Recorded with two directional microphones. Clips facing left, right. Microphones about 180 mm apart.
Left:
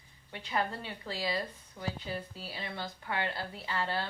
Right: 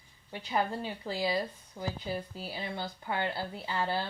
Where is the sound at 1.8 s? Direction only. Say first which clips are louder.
Right 2 dB; 30° right (ahead or behind).